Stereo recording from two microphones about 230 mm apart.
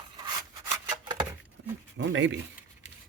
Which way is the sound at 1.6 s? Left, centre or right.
Right.